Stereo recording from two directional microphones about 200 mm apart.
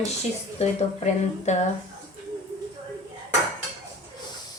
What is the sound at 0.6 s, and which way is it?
A woman's voice, 30° left (ahead or behind).